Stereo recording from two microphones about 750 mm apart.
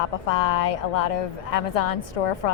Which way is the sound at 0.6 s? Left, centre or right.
Left.